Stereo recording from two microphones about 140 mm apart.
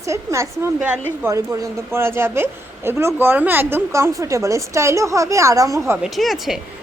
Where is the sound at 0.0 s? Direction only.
20° right (ahead or behind).